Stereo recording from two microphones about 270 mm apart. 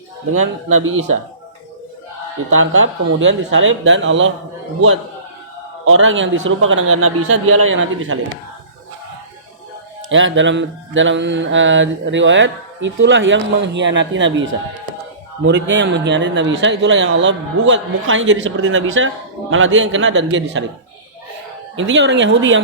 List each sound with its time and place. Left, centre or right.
0.3 s speech: right
2.5 s speech: right
5.8 s speech: right
10.1 s speech: right
15.4 s speech: right
21.8 s speech: right